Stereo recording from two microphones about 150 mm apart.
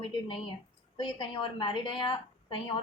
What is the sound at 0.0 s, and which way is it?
A woman's voice, 35° left (ahead or behind).